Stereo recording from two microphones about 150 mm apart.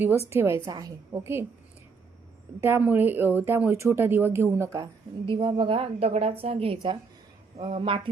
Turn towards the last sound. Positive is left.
turn(degrees=-35)  # may be behind; listen again after turning